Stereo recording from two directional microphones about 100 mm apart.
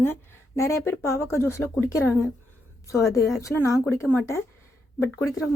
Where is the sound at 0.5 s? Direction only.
25° left (ahead or behind).